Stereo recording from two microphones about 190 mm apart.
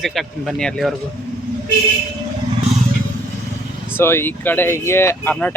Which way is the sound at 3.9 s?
10° left (ahead or behind).